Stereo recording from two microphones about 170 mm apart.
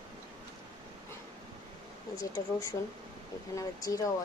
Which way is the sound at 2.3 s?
20° left (ahead or behind).